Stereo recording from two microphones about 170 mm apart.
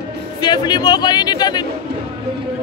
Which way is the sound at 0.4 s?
25° left (ahead or behind).